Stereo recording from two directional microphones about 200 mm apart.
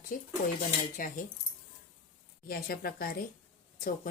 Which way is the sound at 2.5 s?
50° left (ahead or behind).